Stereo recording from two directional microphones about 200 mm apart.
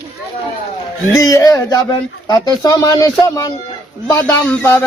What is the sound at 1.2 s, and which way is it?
Speech, 15° left (ahead or behind).